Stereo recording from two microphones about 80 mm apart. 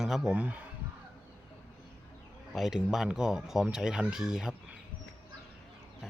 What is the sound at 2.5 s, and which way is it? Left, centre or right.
Speech, centre.